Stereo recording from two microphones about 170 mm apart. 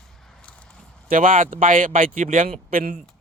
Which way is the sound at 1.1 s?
50° right (ahead or behind).